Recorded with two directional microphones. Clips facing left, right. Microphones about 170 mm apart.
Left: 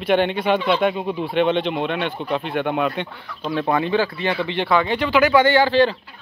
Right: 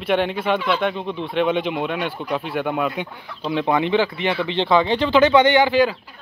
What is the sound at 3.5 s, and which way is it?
Speech, 20° right (ahead or behind).